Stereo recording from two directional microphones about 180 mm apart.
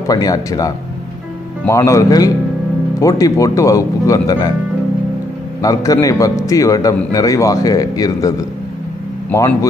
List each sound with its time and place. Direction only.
0.1 s speech: 20° left (ahead or behind)
5.6 s speech: 20° left (ahead or behind)
9.3 s speech: 15° left (ahead or behind)